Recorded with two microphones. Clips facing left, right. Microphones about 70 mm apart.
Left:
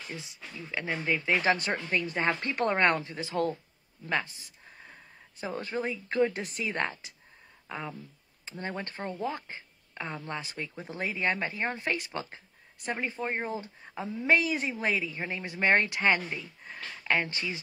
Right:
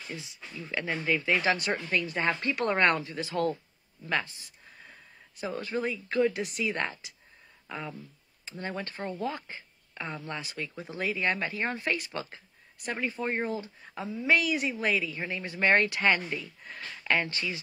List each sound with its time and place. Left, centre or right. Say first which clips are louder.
0.8 s a woman's voice: right 1 dB; left
4.1 s a sound: even; left
5.4 s speech: right 1 dB; left
7.6 s a woman's voice: even; left